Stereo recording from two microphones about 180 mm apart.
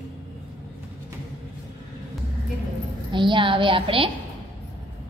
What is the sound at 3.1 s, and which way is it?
A woman's voice, 25° right (ahead or behind).